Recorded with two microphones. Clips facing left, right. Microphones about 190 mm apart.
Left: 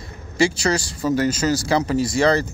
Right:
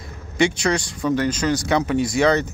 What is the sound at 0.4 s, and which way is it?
Speech, centre (ahead or behind).